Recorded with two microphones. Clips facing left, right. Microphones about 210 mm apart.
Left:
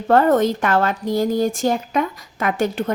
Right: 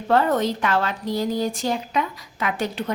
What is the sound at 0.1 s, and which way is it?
A woman's voice, 50° left (ahead or behind).